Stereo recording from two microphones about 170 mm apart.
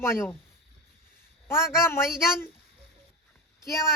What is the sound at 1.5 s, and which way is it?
Speech, 15° left (ahead or behind).